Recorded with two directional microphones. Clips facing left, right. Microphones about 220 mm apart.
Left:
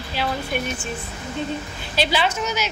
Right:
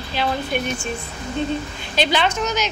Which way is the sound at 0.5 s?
5° left (ahead or behind).